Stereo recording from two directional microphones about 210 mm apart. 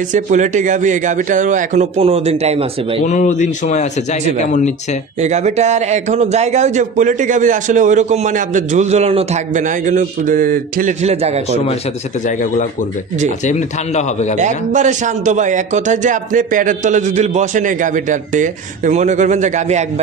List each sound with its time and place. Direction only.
0.1 s speech: 35° right (ahead or behind)
3.1 s a man's voice: 35° left (ahead or behind)
5.2 s speech: 30° right (ahead or behind)
14.4 s speech: 35° right (ahead or behind)